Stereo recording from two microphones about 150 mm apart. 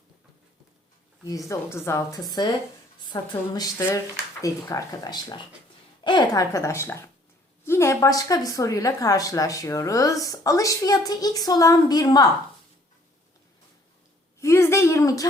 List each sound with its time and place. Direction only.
1.3 s speech: 20° left (ahead or behind)
14.4 s a woman's voice: 20° left (ahead or behind)